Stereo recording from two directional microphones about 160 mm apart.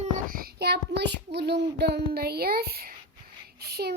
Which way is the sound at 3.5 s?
75° right (ahead or behind).